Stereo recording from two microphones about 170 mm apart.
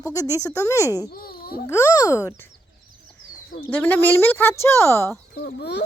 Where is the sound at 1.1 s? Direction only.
60° left (ahead or behind).